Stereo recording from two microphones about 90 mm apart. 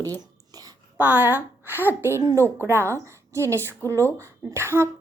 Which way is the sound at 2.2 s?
35° right (ahead or behind).